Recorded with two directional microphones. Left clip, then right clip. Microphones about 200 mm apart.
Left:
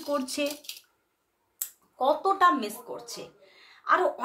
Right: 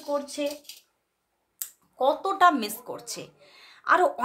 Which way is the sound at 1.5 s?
30° right (ahead or behind).